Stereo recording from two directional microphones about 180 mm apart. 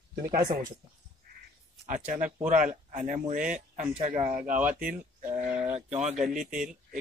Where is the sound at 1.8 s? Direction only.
45° right (ahead or behind).